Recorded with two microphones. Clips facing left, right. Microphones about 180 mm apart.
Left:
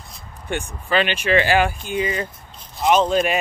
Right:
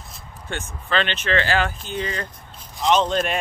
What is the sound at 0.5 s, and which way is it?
Speech, 15° left (ahead or behind).